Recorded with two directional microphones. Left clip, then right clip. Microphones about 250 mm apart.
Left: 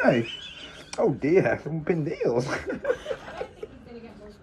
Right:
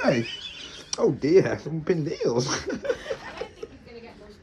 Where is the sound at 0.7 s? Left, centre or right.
Centre.